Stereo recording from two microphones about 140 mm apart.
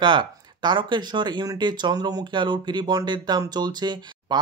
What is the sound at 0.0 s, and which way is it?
Speech, 35° right (ahead or behind).